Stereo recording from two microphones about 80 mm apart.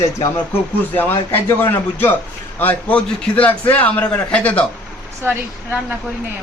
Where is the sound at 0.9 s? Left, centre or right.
Left.